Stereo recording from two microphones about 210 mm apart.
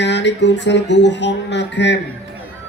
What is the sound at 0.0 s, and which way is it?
A man's voice, 55° left (ahead or behind).